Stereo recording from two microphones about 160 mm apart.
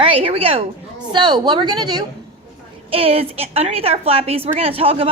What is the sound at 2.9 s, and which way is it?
A woman's voice, 35° right (ahead or behind).